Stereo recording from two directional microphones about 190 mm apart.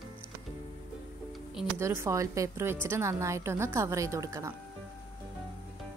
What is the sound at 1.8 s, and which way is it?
A woman's voice, 15° right (ahead or behind).